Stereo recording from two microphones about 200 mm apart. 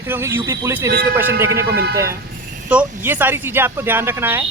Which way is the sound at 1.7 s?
55° right (ahead or behind).